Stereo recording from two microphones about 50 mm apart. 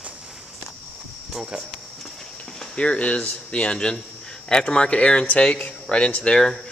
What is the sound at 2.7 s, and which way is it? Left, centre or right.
Speech, left.